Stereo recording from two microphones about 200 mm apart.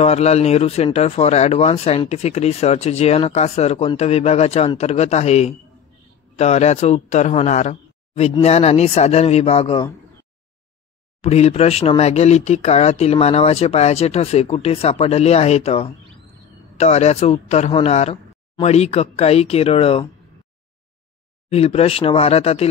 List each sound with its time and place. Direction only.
0.0 s speech: 30° left (ahead or behind)
11.1 s speech: 30° left (ahead or behind)
21.5 s speech: 30° left (ahead or behind)